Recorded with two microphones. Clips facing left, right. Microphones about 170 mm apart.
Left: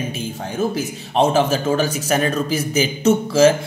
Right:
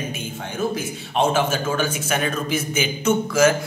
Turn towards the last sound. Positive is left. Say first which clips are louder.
# left 4 dB
turn(degrees=30)  # may be behind; listen again after turning